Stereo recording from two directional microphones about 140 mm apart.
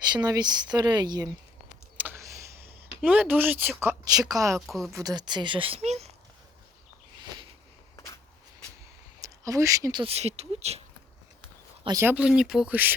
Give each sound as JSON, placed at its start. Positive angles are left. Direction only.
{"t": 0.0, "sound": "speech", "side_deg": -30}
{"t": 2.0, "sound": "a sound", "side_deg": -15}
{"t": 3.0, "sound": "speech", "side_deg": -10}
{"t": 4.6, "sound": "speech", "side_deg": 0}
{"t": 4.9, "sound": "speech", "side_deg": -30}
{"t": 7.9, "sound": "a sound", "side_deg": 25}
{"t": 9.2, "sound": "speech", "side_deg": -25}
{"t": 10.0, "sound": "speech", "side_deg": -45}
{"t": 11.9, "sound": "speech", "side_deg": -20}
{"t": 12.1, "sound": "speech", "side_deg": -5}